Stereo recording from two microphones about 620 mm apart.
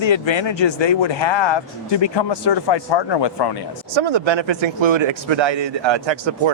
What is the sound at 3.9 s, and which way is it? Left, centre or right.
Speech, right.